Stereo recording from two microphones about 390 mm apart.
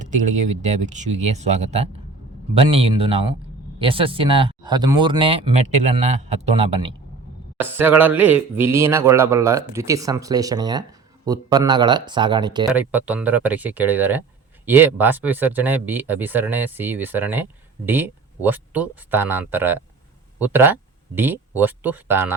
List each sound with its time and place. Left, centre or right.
0.0 s speech: centre